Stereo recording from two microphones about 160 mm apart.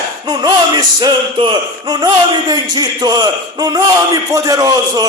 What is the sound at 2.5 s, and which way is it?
Speech, 25° right (ahead or behind).